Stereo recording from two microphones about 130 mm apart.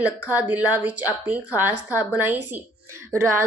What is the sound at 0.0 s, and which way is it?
A woman's voice, 10° right (ahead or behind).